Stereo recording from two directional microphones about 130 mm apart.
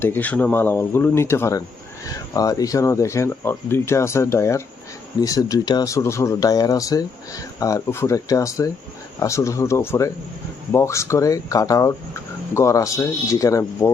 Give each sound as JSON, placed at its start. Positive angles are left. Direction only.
{"t": 0.0, "sound": "speech", "side_deg": 15}